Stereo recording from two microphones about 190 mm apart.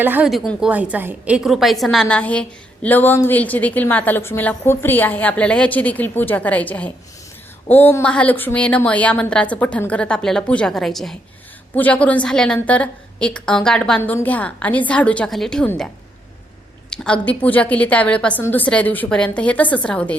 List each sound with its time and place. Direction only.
0.0 s a woman's voice: 10° right (ahead or behind)
16.9 s a woman's voice: 5° left (ahead or behind)